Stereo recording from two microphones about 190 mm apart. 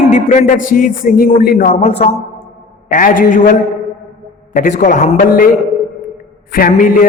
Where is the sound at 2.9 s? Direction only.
45° left (ahead or behind).